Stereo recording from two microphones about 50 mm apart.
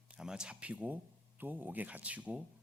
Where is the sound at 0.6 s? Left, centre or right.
Right.